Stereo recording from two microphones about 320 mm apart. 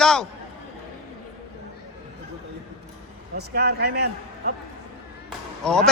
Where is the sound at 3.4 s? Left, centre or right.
Right.